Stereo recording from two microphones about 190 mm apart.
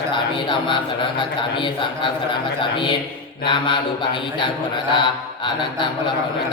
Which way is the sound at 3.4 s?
25° left (ahead or behind).